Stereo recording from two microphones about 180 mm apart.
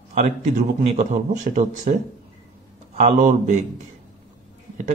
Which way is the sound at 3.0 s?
45° right (ahead or behind).